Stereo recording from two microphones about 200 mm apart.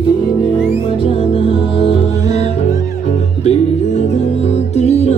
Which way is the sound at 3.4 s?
30° left (ahead or behind).